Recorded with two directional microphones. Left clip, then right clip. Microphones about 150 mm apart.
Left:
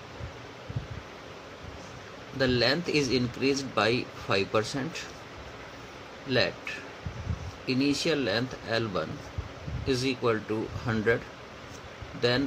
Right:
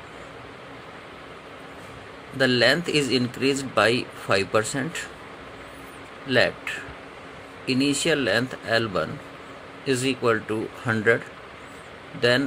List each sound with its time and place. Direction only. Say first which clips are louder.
2.3 s speech: right 6 dB; 15° right (ahead or behind)
6.2 s speech: right 6 dB; 15° right (ahead or behind)
7.6 s speech: right 4 dB; 15° right (ahead or behind)
12.2 s speech: right 6 dB; 15° right (ahead or behind)